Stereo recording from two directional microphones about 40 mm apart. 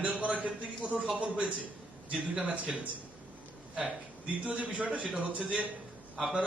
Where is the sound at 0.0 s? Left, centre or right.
Right.